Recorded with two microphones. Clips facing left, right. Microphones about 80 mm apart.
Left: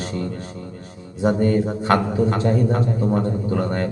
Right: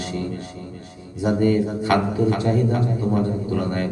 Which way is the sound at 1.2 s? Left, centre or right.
Left.